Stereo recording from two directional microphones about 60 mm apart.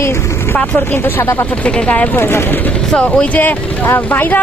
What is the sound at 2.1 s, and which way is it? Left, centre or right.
Speech, left.